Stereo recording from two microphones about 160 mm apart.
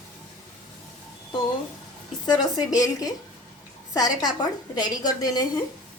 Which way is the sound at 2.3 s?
25° left (ahead or behind).